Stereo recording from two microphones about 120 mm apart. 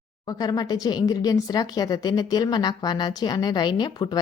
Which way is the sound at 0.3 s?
30° left (ahead or behind).